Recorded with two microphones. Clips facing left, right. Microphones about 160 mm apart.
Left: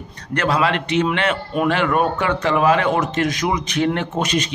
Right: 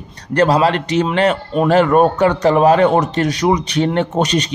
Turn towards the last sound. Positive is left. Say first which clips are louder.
# right 5 dB
turn(degrees=-35)  # may be behind; listen again after turning